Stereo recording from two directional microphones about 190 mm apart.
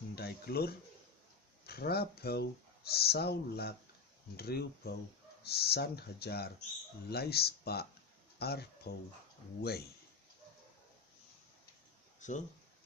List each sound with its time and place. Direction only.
0.2 s speech: 55° left (ahead or behind)
12.2 s speech: 40° left (ahead or behind)